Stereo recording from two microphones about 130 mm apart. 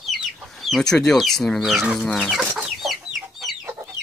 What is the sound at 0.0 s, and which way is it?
Chicken, centre (ahead or behind).